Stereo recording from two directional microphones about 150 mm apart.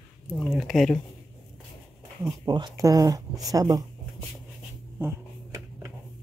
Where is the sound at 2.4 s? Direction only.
30° right (ahead or behind).